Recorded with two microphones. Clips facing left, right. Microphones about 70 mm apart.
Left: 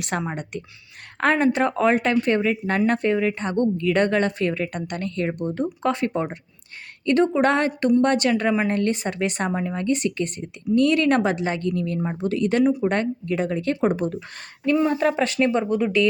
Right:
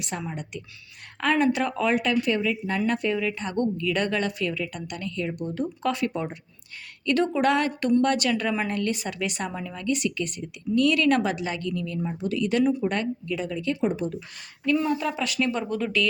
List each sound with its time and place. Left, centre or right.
0.2 s speech: left
1.2 s speech: left
5.4 s speech: left
11.7 s speech: left
14.9 s speech: left